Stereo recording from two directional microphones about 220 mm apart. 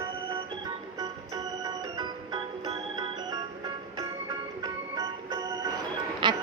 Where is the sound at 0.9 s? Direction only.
15° right (ahead or behind).